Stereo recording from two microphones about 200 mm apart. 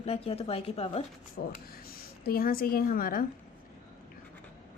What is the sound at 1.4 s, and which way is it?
A woman's voice, 50° left (ahead or behind).